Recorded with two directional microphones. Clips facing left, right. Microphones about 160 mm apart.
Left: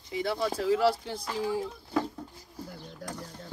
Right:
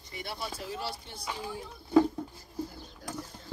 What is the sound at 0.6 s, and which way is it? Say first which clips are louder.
Speech: left 13 dB; 90° left.